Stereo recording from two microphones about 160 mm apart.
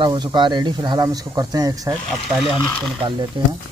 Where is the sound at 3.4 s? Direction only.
30° right (ahead or behind).